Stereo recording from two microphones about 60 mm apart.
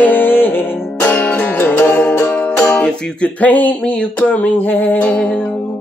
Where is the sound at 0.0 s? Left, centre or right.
Left.